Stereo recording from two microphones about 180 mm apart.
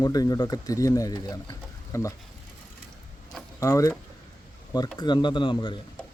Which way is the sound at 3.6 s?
20° left (ahead or behind).